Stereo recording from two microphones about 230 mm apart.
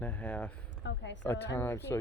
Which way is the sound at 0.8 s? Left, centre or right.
Left.